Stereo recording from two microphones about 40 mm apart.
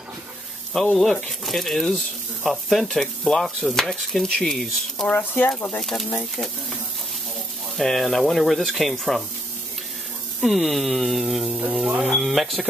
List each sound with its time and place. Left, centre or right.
0.7 s dishes: centre
1.4 s speech: centre
2.9 s dishes: centre
3.4 s speech: centre
4.0 s dishes: centre
5.1 s speech: left
5.8 s dishes: centre
7.7 s speech: centre
10.4 s speech: centre